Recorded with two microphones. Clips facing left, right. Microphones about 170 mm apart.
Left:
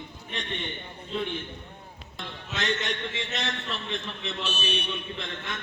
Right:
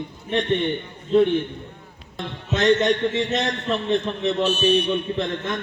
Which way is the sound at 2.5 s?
40° right (ahead or behind).